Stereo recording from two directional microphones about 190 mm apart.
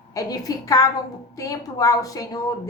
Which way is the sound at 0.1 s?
20° left (ahead or behind).